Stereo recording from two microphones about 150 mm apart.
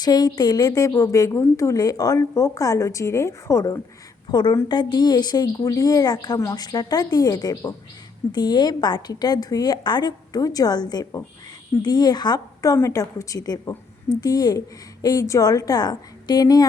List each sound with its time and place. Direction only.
0.0 s a woman's voice: 25° left (ahead or behind)